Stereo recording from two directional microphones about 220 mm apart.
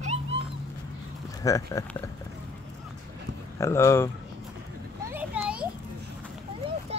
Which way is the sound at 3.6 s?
10° left (ahead or behind).